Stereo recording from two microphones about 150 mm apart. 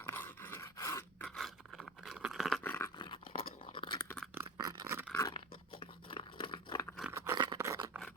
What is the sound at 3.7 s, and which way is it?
Chewing, 30° left (ahead or behind).